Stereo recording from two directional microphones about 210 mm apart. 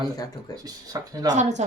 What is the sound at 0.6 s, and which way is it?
Speech, 20° right (ahead or behind).